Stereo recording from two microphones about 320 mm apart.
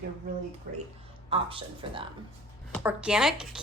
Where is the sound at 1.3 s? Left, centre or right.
Centre.